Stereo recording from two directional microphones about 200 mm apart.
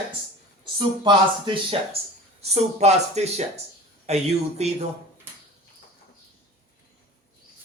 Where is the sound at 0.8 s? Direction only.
25° right (ahead or behind).